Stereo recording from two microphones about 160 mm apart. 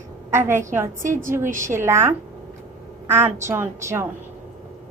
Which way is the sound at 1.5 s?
55° right (ahead or behind).